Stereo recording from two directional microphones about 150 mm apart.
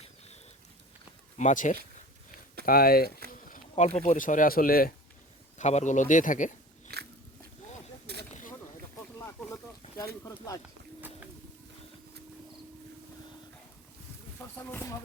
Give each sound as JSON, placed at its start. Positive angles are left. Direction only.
{"t": 1.4, "sound": "speech", "side_deg": 55}
{"t": 2.6, "sound": "speech", "side_deg": 90}
{"t": 3.5, "sound": "speech", "side_deg": 50}
{"t": 5.5, "sound": "speech", "side_deg": 50}
{"t": 8.3, "sound": "a sound", "side_deg": 60}
{"t": 9.1, "sound": "a sound", "side_deg": 20}
{"t": 10.2, "sound": "speech", "side_deg": 25}
{"t": 14.7, "sound": "speech", "side_deg": 20}